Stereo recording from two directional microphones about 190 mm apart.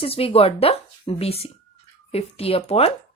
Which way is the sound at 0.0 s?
30° left (ahead or behind).